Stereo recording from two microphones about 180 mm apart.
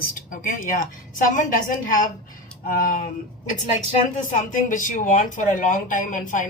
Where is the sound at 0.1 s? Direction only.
50° left (ahead or behind).